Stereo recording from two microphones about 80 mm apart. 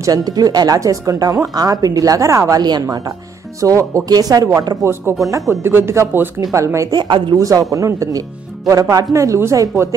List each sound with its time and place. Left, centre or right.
0.0 s speech: right
2.6 s speech: right
3.6 s speech: right
5.5 s speech: right
6.9 s speech: right
7.3 s speech: right